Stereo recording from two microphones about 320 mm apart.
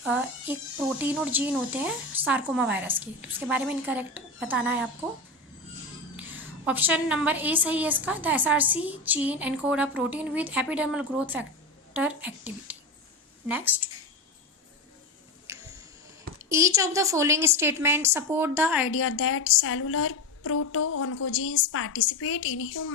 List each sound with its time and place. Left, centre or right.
0.0 s a woman's voice: centre
6.1 s a woman's voice: centre
15.5 s tick-tock: centre
16.5 s a woman's voice: centre
18.9 s a woman's voice: left